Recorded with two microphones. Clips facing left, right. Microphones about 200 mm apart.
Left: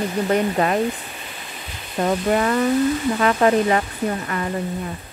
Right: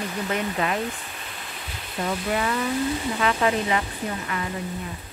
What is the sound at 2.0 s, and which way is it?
Speech, 45° left (ahead or behind).